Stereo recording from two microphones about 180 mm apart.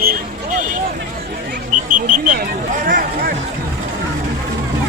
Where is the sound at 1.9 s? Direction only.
45° right (ahead or behind).